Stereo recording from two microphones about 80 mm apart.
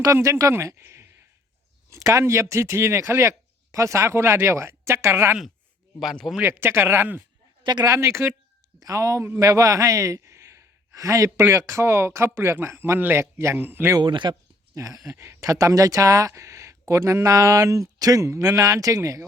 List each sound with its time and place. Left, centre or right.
0.0 s speech: right
6.4 s speech: right
7.6 s speech: right
7.9 s a man's voice: right
14.0 s speech: right
14.8 s speech: right